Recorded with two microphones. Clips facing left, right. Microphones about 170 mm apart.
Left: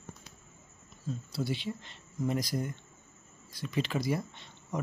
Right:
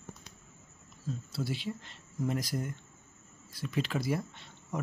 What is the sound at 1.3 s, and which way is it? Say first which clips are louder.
Speech: left 2 dB; centre (ahead or behind).